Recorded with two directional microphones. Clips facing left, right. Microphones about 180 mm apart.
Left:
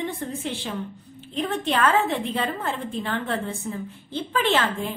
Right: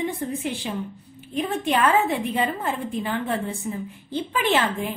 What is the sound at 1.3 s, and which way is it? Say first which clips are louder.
A woman's voice: right 1 dB; 10° right (ahead or behind).